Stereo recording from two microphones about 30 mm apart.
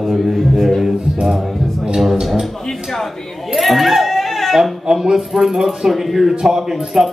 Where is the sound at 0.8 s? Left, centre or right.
Centre.